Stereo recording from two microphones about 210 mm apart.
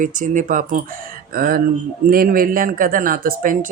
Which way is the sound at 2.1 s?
45° right (ahead or behind).